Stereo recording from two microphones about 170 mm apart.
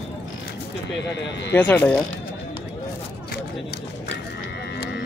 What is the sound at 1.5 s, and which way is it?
Speech, 10° left (ahead or behind).